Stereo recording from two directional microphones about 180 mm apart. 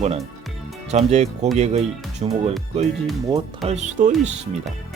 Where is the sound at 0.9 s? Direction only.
40° right (ahead or behind).